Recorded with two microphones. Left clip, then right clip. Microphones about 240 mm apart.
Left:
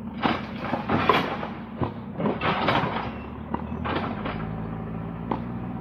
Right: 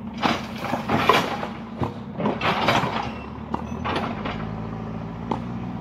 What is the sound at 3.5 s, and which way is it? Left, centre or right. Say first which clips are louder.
Mechanisms: right 2 dB; right.